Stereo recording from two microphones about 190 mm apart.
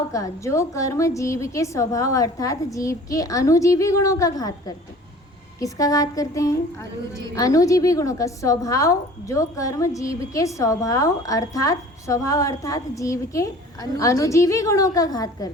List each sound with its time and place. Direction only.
0.1 s a woman's voice: 15° left (ahead or behind)